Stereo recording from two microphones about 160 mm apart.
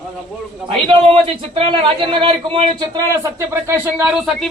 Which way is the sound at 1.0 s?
35° right (ahead or behind).